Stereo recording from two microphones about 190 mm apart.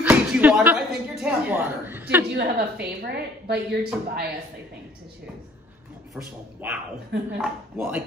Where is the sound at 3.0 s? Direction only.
60° right (ahead or behind).